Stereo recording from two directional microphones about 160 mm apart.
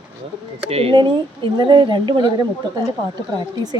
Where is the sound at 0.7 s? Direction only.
35° right (ahead or behind).